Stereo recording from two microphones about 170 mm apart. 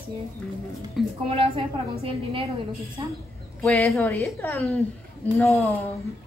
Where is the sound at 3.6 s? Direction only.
Centre (ahead or behind).